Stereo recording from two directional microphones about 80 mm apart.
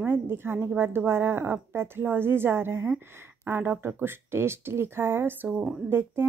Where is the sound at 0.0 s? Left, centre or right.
Right.